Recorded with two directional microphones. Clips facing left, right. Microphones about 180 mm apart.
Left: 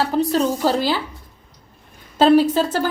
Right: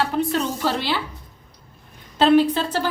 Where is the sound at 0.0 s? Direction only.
35° left (ahead or behind).